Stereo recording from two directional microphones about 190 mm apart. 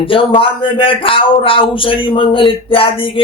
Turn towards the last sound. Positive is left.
turn(degrees=25)  # may be behind; listen again after turning